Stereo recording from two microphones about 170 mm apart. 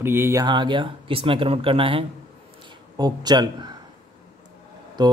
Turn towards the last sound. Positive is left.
turn(degrees=-25)  # may be behind; listen again after turning